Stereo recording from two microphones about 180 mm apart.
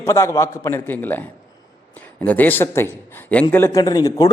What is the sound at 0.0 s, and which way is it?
A man's voice, 15° left (ahead or behind).